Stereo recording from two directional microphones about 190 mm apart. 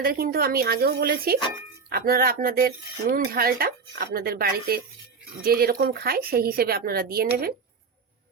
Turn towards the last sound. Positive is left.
turn(degrees=-55)  # may be behind; listen again after turning